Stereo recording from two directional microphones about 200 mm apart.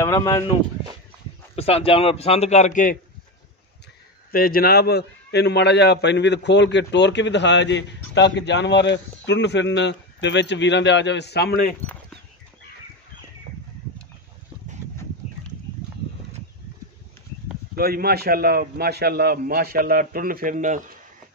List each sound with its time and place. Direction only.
0.0 s a man's voice: 15° left (ahead or behind)
1.5 s a man's voice: 30° left (ahead or behind)
4.3 s a man's voice: 45° left (ahead or behind)
14.8 s a sound: 10° right (ahead or behind)
17.7 s a man's voice: 50° right (ahead or behind)